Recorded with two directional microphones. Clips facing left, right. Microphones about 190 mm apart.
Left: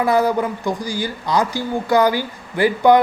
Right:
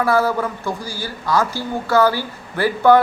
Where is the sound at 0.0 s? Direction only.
15° left (ahead or behind).